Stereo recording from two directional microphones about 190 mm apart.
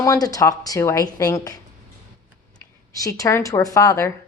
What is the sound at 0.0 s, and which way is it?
A woman's voice, 20° left (ahead or behind).